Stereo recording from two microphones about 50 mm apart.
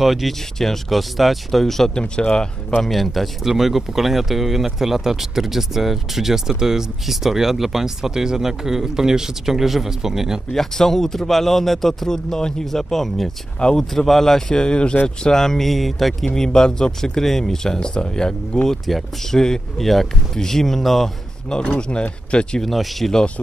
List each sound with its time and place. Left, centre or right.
0.0 s speech: centre
2.0 s speech: centre
2.8 s speech: centre
10.5 s speech: centre
16.3 s speech: centre
18.7 s speech: centre
21.5 s speech: centre
22.7 s speech: centre
23.1 s speech: left